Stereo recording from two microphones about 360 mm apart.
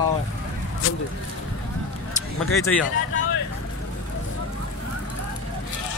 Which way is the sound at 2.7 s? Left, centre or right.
Centre.